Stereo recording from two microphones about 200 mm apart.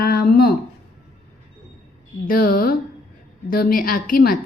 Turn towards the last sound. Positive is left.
turn(degrees=45)  # may be behind; listen again after turning